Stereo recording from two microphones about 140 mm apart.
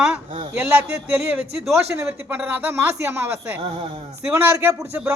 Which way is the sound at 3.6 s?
40° right (ahead or behind).